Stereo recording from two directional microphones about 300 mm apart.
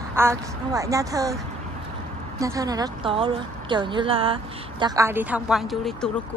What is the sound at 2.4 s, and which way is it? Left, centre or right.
A woman's voice, centre.